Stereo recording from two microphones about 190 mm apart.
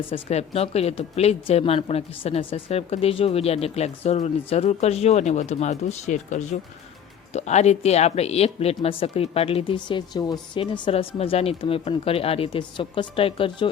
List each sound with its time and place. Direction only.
0.1 s speech: 35° left (ahead or behind)